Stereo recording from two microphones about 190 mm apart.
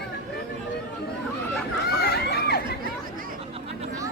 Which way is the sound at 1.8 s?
55° left (ahead or behind).